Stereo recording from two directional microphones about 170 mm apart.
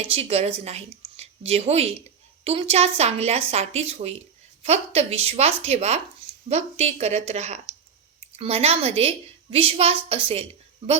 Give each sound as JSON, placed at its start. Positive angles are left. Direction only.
{"t": 0.0, "sound": "a woman's voice", "side_deg": -35}